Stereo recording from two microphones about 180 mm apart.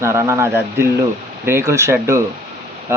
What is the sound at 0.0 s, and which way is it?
Speech, 15° right (ahead or behind).